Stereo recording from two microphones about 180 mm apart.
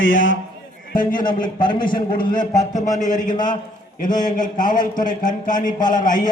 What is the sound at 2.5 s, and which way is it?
A man's voice, 40° left (ahead or behind).